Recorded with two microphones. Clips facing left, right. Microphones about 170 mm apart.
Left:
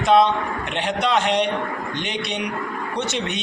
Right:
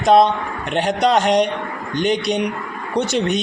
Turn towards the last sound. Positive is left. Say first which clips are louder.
# right 6 dB
turn(degrees=-40)  # may be behind; listen again after turning